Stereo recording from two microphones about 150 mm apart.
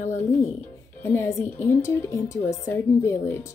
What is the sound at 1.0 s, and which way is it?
A woman's voice, 15° left (ahead or behind).